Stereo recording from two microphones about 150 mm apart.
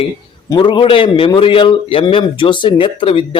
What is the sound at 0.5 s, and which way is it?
A man's voice, 30° left (ahead or behind).